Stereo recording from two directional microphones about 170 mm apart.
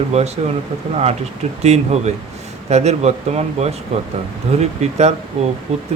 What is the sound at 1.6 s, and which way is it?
Speech, 40° right (ahead or behind).